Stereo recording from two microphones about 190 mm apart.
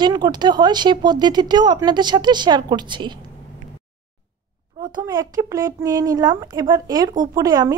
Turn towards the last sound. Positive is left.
turn(degrees=-20)  # may be behind; listen again after turning